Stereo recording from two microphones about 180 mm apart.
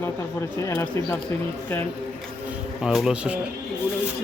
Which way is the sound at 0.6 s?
15° left (ahead or behind).